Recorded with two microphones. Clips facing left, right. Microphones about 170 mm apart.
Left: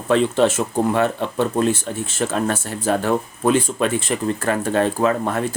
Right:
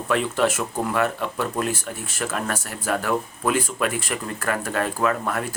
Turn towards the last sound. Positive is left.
turn(degrees=30)  # may be behind; listen again after turning